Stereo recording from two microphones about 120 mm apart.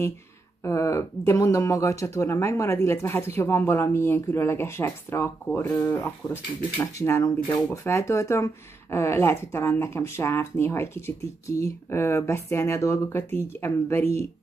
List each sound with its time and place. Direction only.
0.7 s speech: 25° left (ahead or behind)